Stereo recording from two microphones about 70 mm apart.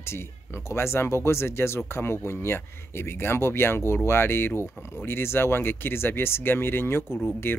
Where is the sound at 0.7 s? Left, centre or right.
Left.